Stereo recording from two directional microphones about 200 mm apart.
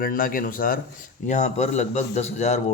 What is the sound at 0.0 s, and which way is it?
Speech, 45° left (ahead or behind).